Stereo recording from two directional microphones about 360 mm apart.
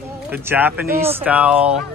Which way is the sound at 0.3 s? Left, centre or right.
Centre.